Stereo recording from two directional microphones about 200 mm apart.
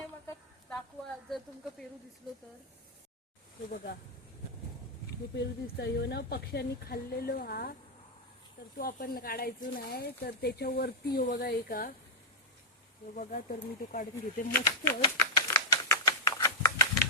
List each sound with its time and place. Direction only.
0.7 s a sound: 5° left (ahead or behind)
5.8 s speech: 55° left (ahead or behind)
8.8 s speech: 50° left (ahead or behind)
13.1 s speech: 45° left (ahead or behind)
14.6 s typewriter: 20° left (ahead or behind)